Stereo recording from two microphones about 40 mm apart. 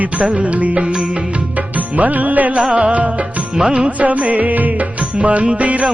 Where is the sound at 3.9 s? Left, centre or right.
Right.